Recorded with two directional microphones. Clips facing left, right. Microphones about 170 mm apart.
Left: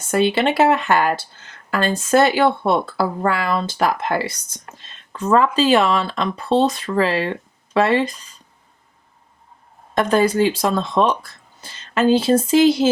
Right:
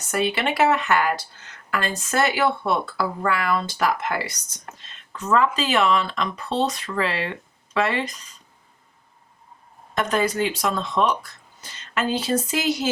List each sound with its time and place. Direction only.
0.1 s speech: 30° left (ahead or behind)
10.0 s speech: 30° left (ahead or behind)